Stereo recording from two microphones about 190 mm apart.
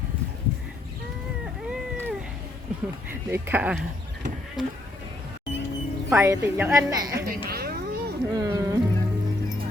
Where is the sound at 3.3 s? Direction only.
10° right (ahead or behind).